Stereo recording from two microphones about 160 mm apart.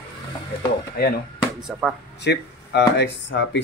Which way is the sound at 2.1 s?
90° left.